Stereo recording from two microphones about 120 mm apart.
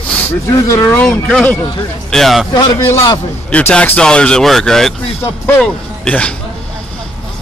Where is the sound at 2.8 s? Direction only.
20° left (ahead or behind).